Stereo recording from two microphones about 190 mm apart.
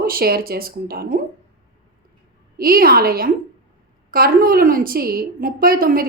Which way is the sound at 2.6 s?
50° right (ahead or behind).